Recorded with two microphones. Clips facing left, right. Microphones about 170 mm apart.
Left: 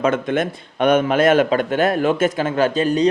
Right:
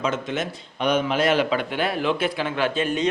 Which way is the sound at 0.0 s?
55° left (ahead or behind).